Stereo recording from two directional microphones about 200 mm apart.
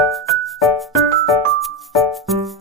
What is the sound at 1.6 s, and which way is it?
Music, centre (ahead or behind).